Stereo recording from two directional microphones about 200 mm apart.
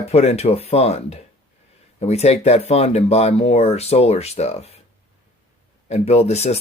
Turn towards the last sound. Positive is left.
turn(degrees=35)  # may be behind; listen again after turning